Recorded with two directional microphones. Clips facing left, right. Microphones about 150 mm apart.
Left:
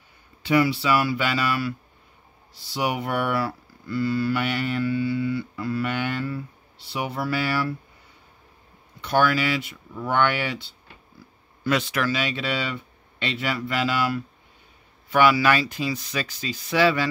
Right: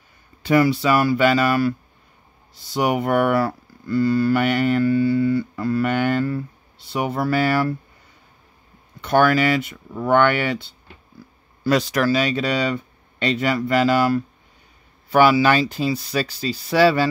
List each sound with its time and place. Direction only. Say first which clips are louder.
0.4 s speech: right 4 dB; 45° right (ahead or behind)
9.0 s speech: right 5 dB; 50° right (ahead or behind)
11.6 s speech: right 5 dB; 40° right (ahead or behind)